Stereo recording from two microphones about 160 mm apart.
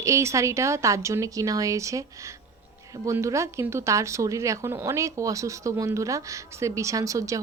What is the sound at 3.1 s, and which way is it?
Speech, 20° right (ahead or behind).